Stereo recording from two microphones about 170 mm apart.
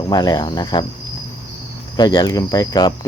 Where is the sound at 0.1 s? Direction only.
25° left (ahead or behind).